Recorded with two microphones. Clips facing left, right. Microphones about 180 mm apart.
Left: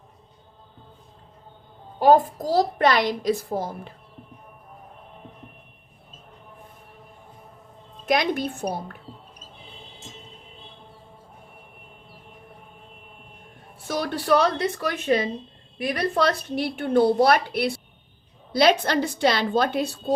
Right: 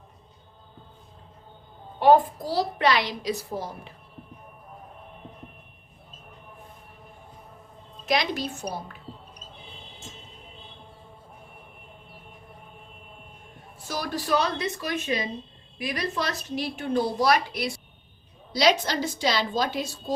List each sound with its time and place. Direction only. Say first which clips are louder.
2.0 s a woman's voice: left 1 dB; 40° left (ahead or behind)
8.0 s a woman's voice: left 3 dB; 55° left (ahead or behind)
13.8 s a woman's voice: left 5 dB; 60° left (ahead or behind)